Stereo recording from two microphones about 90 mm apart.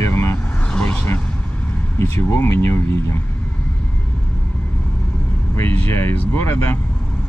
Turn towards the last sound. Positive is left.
turn(degrees=25)  # may be behind; listen again after turning